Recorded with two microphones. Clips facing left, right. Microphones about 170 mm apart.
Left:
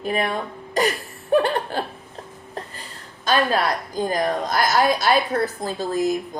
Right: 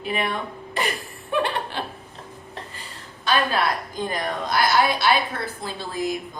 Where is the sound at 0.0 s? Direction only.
40° left (ahead or behind).